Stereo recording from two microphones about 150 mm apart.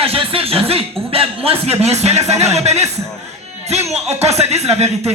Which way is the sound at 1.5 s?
45° right (ahead or behind).